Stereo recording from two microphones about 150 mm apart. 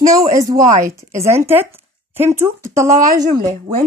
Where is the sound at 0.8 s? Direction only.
20° right (ahead or behind).